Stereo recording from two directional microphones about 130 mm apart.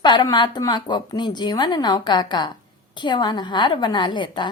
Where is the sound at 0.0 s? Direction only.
35° left (ahead or behind).